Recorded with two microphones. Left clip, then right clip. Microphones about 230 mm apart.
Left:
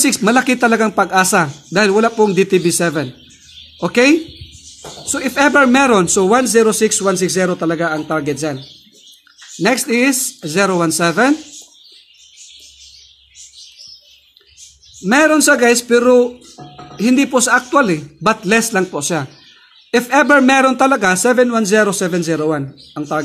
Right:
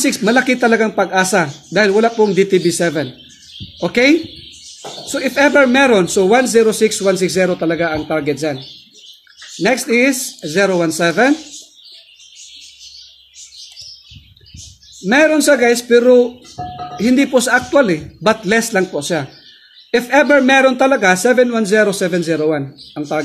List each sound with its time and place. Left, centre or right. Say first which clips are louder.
0.0 s speech: even; centre
9.6 s speech: right 1 dB; centre
15.0 s speech: even; centre